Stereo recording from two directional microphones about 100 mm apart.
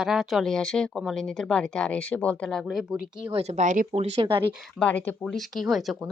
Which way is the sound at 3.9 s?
80° right.